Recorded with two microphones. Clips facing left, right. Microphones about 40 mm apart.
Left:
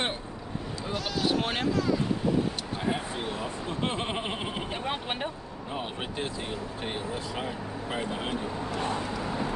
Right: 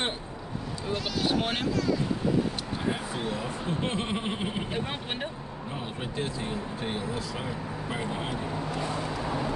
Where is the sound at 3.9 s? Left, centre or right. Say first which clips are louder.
Right 1 dB; left.